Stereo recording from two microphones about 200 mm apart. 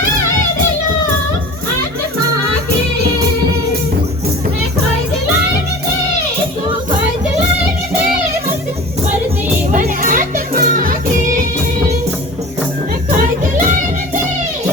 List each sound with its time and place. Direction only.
9.7 s children playing: 40° right (ahead or behind)